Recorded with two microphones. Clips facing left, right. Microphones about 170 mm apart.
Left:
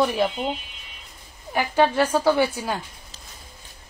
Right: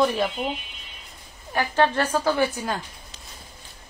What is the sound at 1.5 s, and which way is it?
A woman's voice, 10° left (ahead or behind).